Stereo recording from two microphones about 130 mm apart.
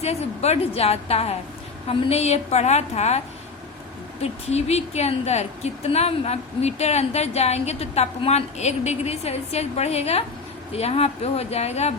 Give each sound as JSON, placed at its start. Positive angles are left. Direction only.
{"t": 0.0, "sound": "a woman's voice", "side_deg": 55}
{"t": 4.2, "sound": "a woman's voice", "side_deg": 55}